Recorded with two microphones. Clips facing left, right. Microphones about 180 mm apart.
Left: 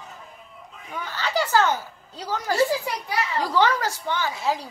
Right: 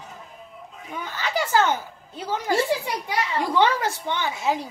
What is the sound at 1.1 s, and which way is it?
A woman's voice, 20° right (ahead or behind).